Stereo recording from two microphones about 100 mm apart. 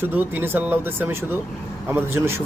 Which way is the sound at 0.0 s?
20° right (ahead or behind).